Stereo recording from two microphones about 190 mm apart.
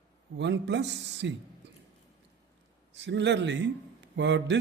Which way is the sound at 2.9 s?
70° right (ahead or behind).